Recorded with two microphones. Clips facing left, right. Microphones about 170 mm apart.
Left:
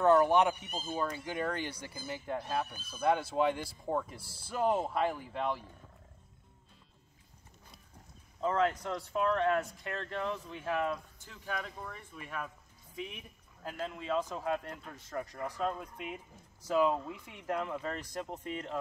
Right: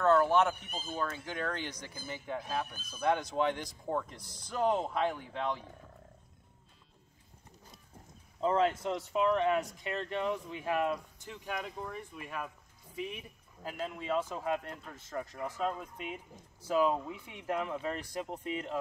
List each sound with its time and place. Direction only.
0.0 s speech: 15° left (ahead or behind)
8.4 s speech: 30° right (ahead or behind); by 18.8 s 5° right (ahead or behind)